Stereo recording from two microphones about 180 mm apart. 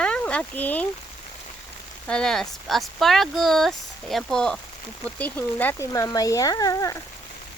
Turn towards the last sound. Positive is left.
turn(degrees=20)  # may be behind; listen again after turning